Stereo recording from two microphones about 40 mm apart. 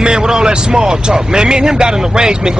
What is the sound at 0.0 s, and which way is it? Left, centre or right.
Speech, centre.